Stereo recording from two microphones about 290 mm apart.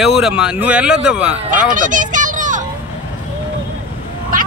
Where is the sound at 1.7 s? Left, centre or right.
Right.